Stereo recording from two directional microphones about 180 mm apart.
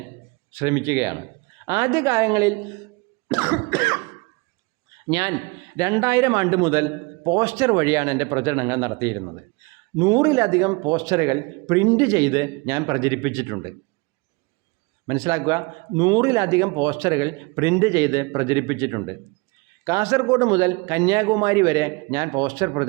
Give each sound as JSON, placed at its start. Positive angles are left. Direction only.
{"t": 0.5, "sound": "speech", "side_deg": -15}
{"t": 3.2, "sound": "cough", "side_deg": -15}
{"t": 5.0, "sound": "a man's voice", "side_deg": -15}
{"t": 15.0, "sound": "speech", "side_deg": -20}